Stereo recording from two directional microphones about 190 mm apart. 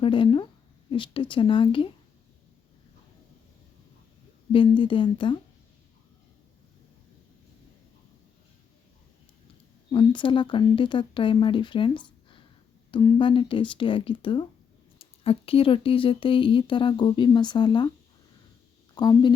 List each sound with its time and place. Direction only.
0.0 s speech: 25° left (ahead or behind)
4.5 s speech: 25° left (ahead or behind)
9.9 s speech: 25° left (ahead or behind)
12.9 s speech: 25° left (ahead or behind)
18.9 s speech: 20° left (ahead or behind)